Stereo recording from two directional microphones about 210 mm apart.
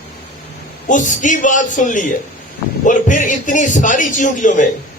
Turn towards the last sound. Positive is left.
turn(degrees=35)  # may be behind; listen again after turning